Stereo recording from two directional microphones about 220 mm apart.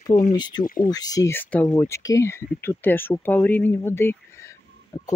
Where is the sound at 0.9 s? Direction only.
15° left (ahead or behind).